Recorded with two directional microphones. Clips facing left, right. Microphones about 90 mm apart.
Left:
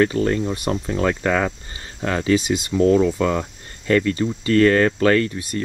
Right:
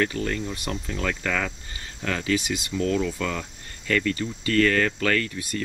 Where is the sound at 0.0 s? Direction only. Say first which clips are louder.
Left 8 dB; 30° left (ahead or behind).